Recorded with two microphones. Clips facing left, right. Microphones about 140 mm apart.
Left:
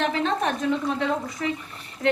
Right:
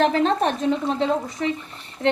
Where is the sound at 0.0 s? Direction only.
35° right (ahead or behind).